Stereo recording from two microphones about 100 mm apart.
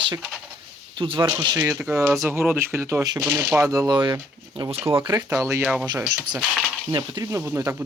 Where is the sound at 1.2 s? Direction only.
35° right (ahead or behind).